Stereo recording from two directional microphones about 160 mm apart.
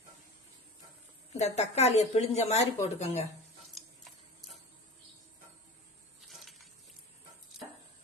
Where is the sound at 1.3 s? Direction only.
45° left (ahead or behind).